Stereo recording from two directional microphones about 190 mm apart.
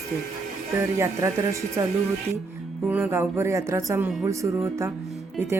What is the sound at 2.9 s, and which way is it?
Speech, 10° right (ahead or behind).